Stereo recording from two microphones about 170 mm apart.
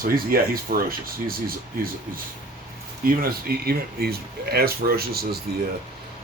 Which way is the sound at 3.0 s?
60° right (ahead or behind).